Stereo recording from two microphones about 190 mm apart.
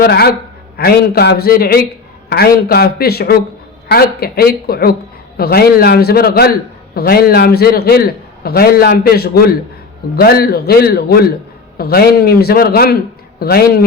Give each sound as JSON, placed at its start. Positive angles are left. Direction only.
{"t": 0.0, "sound": "a man's voice", "side_deg": 55}